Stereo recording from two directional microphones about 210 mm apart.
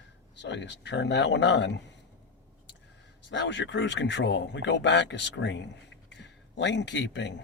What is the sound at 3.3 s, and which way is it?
A man's voice, 60° left (ahead or behind).